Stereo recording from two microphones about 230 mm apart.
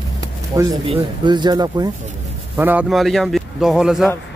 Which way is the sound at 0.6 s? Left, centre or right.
Centre.